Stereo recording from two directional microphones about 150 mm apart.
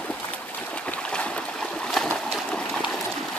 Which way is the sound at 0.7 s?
5° left (ahead or behind).